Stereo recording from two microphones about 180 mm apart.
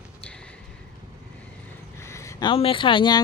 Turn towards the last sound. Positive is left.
turn(degrees=25)  # may be behind; listen again after turning